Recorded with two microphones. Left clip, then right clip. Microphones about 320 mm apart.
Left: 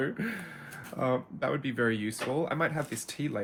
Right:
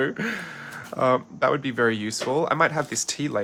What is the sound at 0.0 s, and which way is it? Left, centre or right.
Speech, centre.